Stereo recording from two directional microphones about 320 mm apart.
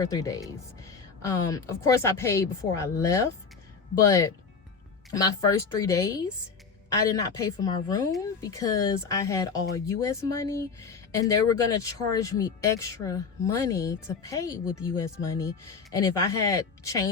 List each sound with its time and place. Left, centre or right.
0.0 s speech: centre
5.1 s speech: centre